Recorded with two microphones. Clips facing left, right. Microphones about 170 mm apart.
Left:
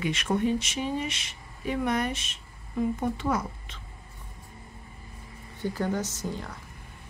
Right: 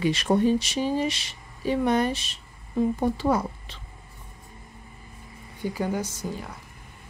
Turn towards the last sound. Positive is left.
turn(degrees=-10)  # may be behind; listen again after turning